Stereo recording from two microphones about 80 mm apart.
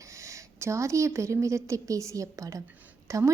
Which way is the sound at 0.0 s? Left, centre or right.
Right.